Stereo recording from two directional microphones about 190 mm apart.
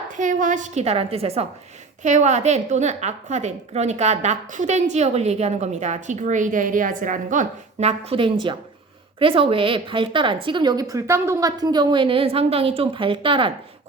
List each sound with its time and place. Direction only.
0.2 s a woman's voice: 40° right (ahead or behind); by 13.5 s 25° right (ahead or behind)